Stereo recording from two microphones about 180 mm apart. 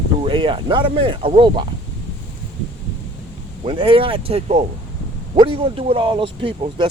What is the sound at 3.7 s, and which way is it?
Speech, 30° right (ahead or behind).